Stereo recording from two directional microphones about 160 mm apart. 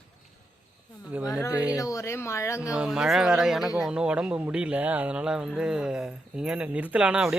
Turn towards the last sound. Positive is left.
turn(degrees=-5)  # may be behind; listen again after turning